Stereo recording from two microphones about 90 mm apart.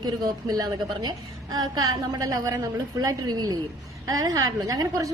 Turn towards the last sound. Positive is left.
turn(degrees=-40)  # may be behind; listen again after turning